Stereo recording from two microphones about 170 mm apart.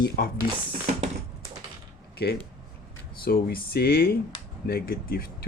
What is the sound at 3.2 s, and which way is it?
Speech, 65° left (ahead or behind).